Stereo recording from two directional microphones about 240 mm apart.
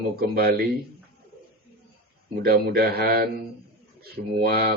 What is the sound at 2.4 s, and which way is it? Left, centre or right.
Mantra, right.